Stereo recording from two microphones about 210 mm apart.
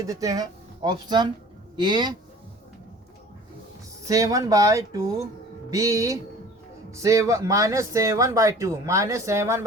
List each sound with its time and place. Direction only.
0.0 s speech: 15° right (ahead or behind)
4.0 s speech: 15° right (ahead or behind)